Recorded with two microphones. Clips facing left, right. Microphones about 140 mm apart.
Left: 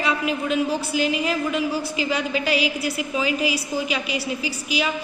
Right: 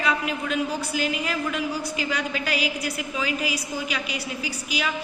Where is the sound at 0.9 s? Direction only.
45° right (ahead or behind).